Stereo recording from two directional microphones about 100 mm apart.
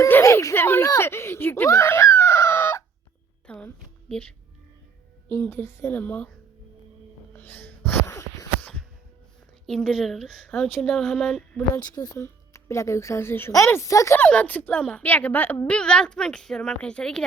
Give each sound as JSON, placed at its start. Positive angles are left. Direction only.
{"t": 0.2, "sound": "speech", "side_deg": 30}
{"t": 0.9, "sound": "screaming", "side_deg": 25}
{"t": 3.4, "sound": "a sound", "side_deg": 10}
{"t": 4.1, "sound": "a woman's voice", "side_deg": 10}
{"t": 5.3, "sound": "a woman's voice", "side_deg": 20}
{"t": 7.3, "sound": "sneeze", "side_deg": 20}
{"t": 8.0, "sound": "a sound", "side_deg": 35}
{"t": 9.6, "sound": "speech", "side_deg": 5}
{"t": 11.8, "sound": "a woman's voice", "side_deg": 40}
{"t": 14.2, "sound": "a woman's voice", "side_deg": 15}